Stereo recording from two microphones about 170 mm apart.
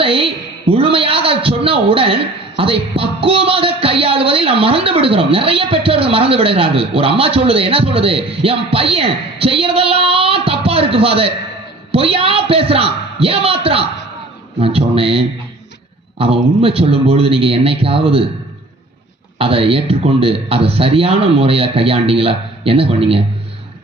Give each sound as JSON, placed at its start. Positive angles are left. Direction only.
{"t": 0.0, "sound": "a woman's voice", "side_deg": -30}
{"t": 19.4, "sound": "a woman's voice", "side_deg": -35}